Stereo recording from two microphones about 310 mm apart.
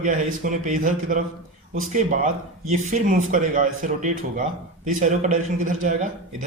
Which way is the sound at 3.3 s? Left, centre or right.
Right.